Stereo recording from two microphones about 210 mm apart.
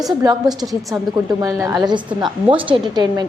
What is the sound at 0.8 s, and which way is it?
Speech, centre (ahead or behind).